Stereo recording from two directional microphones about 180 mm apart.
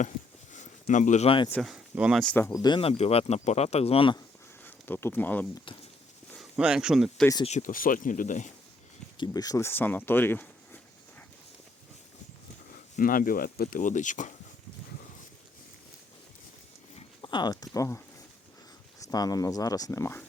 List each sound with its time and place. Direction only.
0.5 s a sound: 45° left (ahead or behind)
1.6 s speech: 5° right (ahead or behind)
2.5 s speech: 25° left (ahead or behind)
4.6 s speech: 10° left (ahead or behind)
6.4 s speech: 5° right (ahead or behind)
7.4 s speech: 45° left (ahead or behind)
9.1 s speech: 25° left (ahead or behind)
12.7 s speech: 50° left (ahead or behind)
17.2 s speech: 25° left (ahead or behind)